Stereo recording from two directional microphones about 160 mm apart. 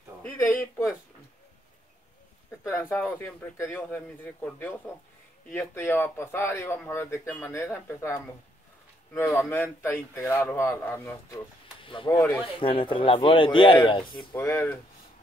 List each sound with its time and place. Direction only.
0.2 s a sound: 15° left (ahead or behind)
2.6 s a man's voice: 15° left (ahead or behind)
11.8 s a man's voice: 35° left (ahead or behind)
14.3 s a man's voice: 15° left (ahead or behind)